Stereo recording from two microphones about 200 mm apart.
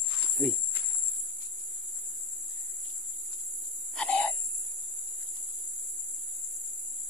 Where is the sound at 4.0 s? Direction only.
5° left (ahead or behind).